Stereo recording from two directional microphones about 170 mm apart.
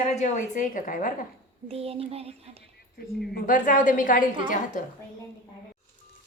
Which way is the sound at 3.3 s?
50° left (ahead or behind).